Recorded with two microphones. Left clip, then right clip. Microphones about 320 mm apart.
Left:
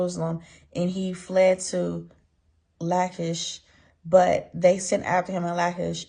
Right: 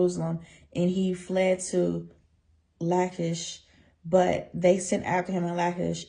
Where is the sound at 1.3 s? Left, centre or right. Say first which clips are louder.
Left 6 dB; left.